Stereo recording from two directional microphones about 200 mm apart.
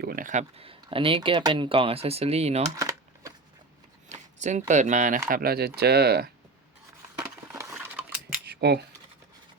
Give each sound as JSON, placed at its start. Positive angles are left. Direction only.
{"t": 0.0, "sound": "speech", "side_deg": -45}
{"t": 2.6, "sound": "typing", "side_deg": -15}
{"t": 4.1, "sound": "a sound", "side_deg": -35}
{"t": 4.7, "sound": "speech", "side_deg": -35}
{"t": 5.3, "sound": "speech", "side_deg": -50}
{"t": 7.5, "sound": "scissors", "side_deg": -15}
{"t": 8.4, "sound": "a sound", "side_deg": -55}